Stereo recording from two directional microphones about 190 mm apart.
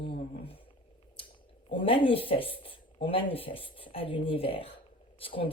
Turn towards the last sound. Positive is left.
turn(degrees=30)  # may be behind; listen again after turning